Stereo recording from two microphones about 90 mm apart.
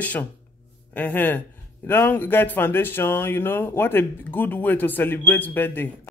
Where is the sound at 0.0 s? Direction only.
15° left (ahead or behind).